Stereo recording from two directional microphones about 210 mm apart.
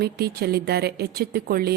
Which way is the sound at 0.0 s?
50° right (ahead or behind).